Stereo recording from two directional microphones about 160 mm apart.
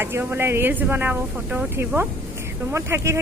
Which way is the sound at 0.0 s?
15° right (ahead or behind).